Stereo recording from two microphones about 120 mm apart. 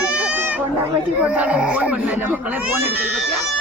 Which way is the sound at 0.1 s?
10° right (ahead or behind).